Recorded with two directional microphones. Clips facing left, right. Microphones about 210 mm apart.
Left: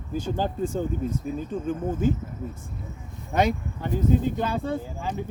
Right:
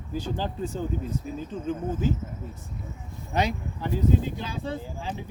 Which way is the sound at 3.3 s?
50° left (ahead or behind).